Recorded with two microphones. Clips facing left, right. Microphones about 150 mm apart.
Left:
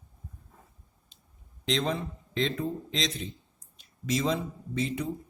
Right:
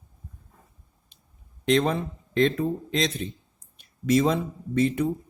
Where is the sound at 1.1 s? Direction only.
55° right (ahead or behind).